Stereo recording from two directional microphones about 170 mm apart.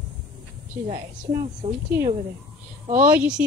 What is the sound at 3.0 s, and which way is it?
Speech, 15° right (ahead or behind).